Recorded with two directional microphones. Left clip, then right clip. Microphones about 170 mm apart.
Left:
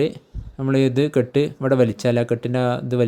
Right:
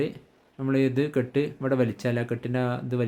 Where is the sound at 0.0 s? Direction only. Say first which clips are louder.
Left 8 dB; 35° left (ahead or behind).